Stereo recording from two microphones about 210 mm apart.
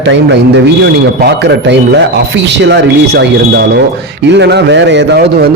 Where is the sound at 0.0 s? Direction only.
55° right (ahead or behind).